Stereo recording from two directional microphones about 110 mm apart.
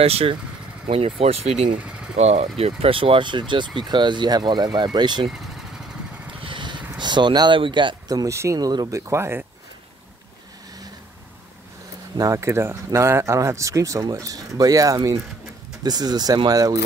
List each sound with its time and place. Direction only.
0.0 s speech: 60° right (ahead or behind); by 2.5 s 75° right (ahead or behind)
2.6 s speech: 55° right (ahead or behind)
6.4 s vehicle: 50° right (ahead or behind)
8.1 s speech: 30° right (ahead or behind)
12.2 s speech: 30° right (ahead or behind)